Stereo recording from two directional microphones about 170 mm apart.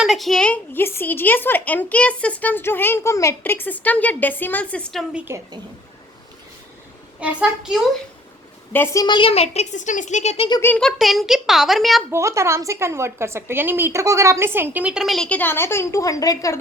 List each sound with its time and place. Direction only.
0.0 s a woman's voice: centre (ahead or behind)
7.2 s a child's voice: 5° right (ahead or behind)
8.7 s a woman's voice: 15° left (ahead or behind); by 10.6 s 35° left (ahead or behind)
10.6 s a child's voice: 10° left (ahead or behind)
12.1 s a woman's voice: 15° right (ahead or behind); by 16.6 s 20° left (ahead or behind)